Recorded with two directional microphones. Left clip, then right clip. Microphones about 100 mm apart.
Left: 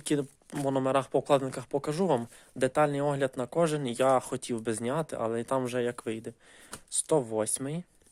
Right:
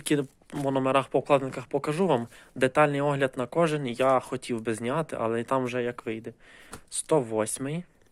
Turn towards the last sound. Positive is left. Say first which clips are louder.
# right 2 dB
turn(degrees=35)  # may be behind; listen again after turning